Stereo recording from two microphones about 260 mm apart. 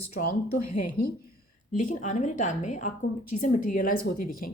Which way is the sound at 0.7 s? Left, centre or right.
Left.